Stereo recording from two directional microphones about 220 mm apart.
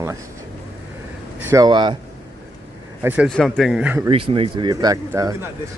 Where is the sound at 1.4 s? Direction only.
15° right (ahead or behind).